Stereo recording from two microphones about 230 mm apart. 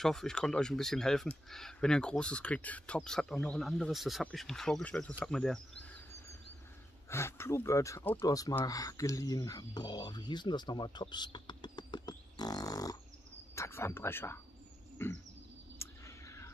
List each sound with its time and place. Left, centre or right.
0.0 s speech: centre
7.1 s speech: centre
15.8 s a sound: centre